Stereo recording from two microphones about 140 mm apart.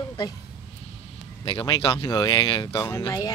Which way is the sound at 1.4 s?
35° left (ahead or behind).